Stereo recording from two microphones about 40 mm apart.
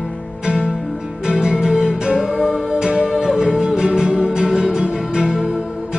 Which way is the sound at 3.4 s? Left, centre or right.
Right.